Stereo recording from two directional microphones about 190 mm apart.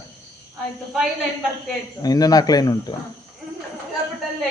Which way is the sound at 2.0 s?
20° left (ahead or behind).